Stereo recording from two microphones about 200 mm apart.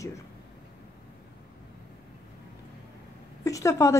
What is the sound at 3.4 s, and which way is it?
Speech, 15° left (ahead or behind).